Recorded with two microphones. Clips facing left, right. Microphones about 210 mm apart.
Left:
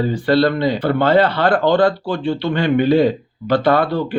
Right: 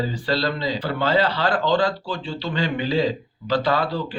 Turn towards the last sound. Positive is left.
turn(degrees=60)  # may be behind; listen again after turning